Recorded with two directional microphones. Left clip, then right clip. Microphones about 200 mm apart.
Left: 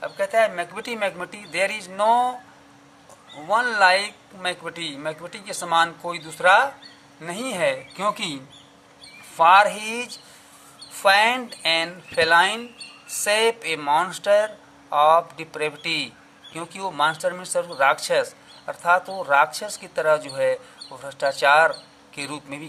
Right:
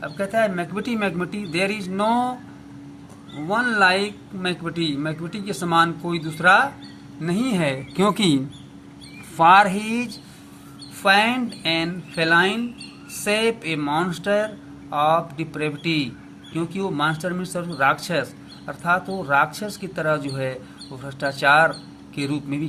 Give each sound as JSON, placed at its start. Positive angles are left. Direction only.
{"t": 0.0, "sound": "speech", "side_deg": 20}
{"t": 3.4, "sound": "speech", "side_deg": 20}
{"t": 7.9, "sound": "speech", "side_deg": -15}
{"t": 9.4, "sound": "speech", "side_deg": 5}